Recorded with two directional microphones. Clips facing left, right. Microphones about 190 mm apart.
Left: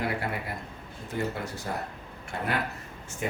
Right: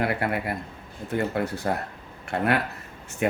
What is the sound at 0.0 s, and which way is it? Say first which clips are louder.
Speech: right 5 dB; 65° right (ahead or behind).